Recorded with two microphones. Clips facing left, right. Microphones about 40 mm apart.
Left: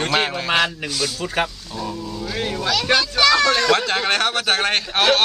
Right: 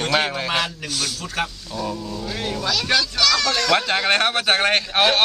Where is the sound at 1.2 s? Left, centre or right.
Left.